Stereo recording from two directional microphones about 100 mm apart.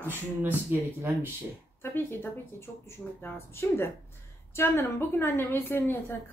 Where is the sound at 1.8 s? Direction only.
20° left (ahead or behind).